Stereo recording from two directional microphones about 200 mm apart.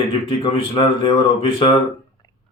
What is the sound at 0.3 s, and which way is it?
Speech, 25° left (ahead or behind).